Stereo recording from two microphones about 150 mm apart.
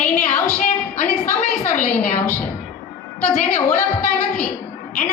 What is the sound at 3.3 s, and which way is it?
Speech, 55° left (ahead or behind).